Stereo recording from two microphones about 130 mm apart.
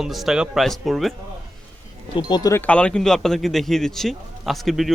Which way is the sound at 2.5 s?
10° left (ahead or behind).